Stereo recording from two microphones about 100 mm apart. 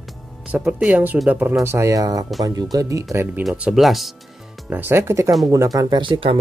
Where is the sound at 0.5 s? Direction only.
15° right (ahead or behind).